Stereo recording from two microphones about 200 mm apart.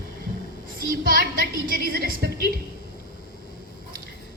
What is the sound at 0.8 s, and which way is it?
A woman's voice, 45° right (ahead or behind).